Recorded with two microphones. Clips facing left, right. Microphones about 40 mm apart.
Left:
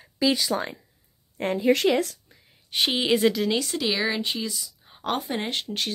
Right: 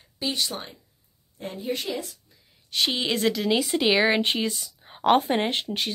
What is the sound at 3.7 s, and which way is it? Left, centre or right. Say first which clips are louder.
A woman's voice: right 5 dB; right.